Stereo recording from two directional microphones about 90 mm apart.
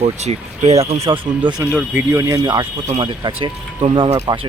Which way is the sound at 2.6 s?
65° right (ahead or behind).